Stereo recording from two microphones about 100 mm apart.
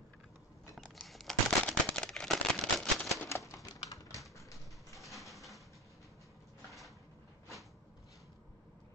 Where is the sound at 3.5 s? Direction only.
35° left (ahead or behind).